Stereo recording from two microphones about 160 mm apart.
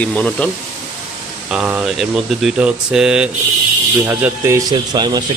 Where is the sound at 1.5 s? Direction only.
5° right (ahead or behind).